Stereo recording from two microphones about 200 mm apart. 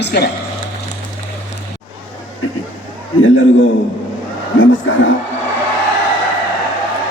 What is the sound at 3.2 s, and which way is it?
Speech, 70° left (ahead or behind).